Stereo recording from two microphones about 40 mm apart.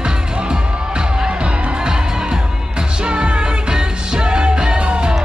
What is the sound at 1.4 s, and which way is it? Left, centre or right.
Music, right.